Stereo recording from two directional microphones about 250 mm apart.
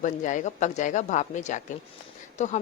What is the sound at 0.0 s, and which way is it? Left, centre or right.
A woman's voice, left.